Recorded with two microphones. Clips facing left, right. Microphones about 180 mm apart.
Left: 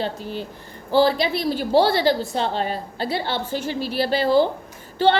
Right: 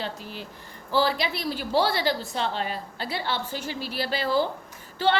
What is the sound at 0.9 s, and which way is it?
A woman's voice, 25° left (ahead or behind).